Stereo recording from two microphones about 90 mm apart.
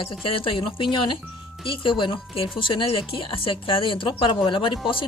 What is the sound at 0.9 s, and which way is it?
A woman's voice, 65° left (ahead or behind).